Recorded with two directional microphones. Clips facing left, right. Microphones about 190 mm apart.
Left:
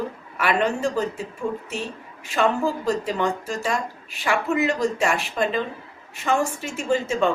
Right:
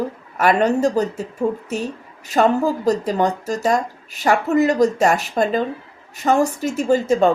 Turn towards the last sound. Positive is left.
turn(degrees=-40)  # may be behind; listen again after turning